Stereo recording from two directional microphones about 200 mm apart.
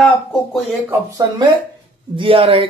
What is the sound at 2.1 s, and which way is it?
Speech, 25° right (ahead or behind).